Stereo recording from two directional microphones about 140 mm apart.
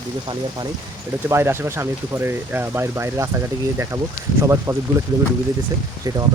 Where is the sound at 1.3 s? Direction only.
15° right (ahead or behind).